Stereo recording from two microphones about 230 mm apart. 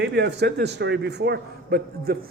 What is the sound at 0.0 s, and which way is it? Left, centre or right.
A man's voice, right.